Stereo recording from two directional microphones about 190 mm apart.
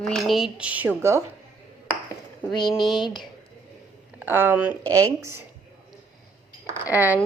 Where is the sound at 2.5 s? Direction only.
25° left (ahead or behind).